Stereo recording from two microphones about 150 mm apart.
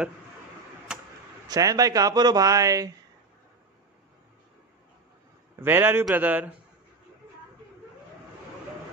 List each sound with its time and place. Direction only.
0.9 s a sound: 5° right (ahead or behind)
1.5 s speech: 25° right (ahead or behind)
5.6 s a man's voice: 15° right (ahead or behind)